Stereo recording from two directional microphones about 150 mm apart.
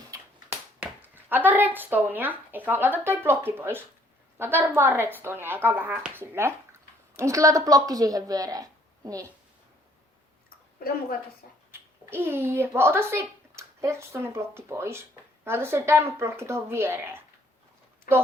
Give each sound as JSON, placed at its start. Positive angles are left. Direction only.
{"t": 0.8, "sound": "a woman's voice", "side_deg": -10}
{"t": 10.8, "sound": "a woman's voice", "side_deg": 90}
{"t": 11.7, "sound": "speech", "side_deg": -15}
{"t": 18.1, "sound": "a woman's voice", "side_deg": 70}